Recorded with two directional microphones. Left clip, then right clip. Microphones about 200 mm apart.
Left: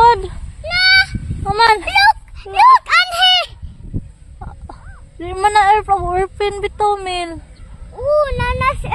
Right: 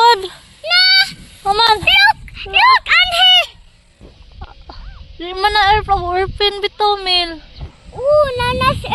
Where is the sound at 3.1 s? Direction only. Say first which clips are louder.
Right 2 dB; 20° right (ahead or behind).